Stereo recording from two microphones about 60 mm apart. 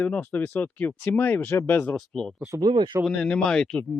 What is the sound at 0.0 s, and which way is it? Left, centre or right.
Speech, left.